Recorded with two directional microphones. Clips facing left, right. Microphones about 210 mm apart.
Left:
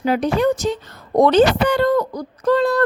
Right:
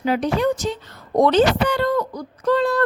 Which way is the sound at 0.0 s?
45° left (ahead or behind).